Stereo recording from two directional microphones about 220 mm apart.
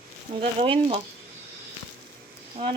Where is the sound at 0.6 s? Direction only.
25° right (ahead or behind).